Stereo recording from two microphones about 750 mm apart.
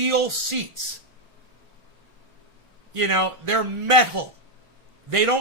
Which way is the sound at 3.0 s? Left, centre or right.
Right.